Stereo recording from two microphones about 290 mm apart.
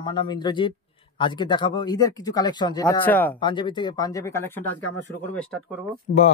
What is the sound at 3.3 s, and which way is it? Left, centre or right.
Speech, centre.